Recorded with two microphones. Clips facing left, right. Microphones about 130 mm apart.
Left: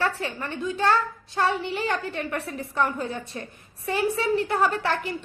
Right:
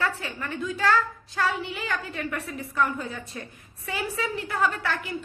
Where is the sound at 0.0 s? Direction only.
30° left (ahead or behind).